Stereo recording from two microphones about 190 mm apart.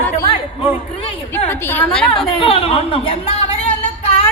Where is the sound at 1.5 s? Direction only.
10° left (ahead or behind).